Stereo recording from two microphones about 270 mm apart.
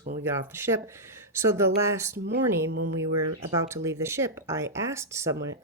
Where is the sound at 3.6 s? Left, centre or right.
Centre.